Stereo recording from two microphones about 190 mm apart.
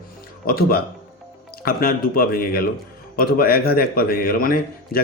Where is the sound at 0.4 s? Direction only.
50° left (ahead or behind).